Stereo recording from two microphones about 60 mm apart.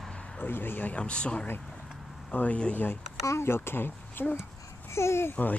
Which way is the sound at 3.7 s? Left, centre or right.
Left.